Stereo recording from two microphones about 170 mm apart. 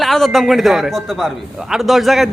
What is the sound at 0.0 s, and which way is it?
A man's voice, centre (ahead or behind).